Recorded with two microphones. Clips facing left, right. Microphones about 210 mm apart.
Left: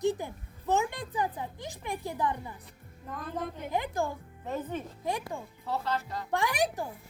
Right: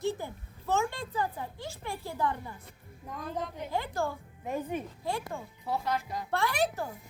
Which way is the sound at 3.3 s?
55° left (ahead or behind).